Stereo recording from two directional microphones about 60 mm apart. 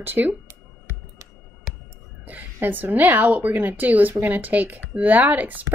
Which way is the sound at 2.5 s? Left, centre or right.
Right.